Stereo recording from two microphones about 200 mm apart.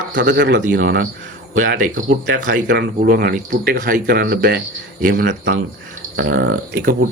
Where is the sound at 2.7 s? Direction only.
50° right (ahead or behind).